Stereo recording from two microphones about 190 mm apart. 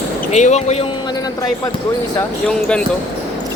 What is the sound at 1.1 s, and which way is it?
Basketball bounce, 20° left (ahead or behind).